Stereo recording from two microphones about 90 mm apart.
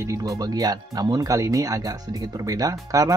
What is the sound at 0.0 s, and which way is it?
Speech, 35° right (ahead or behind).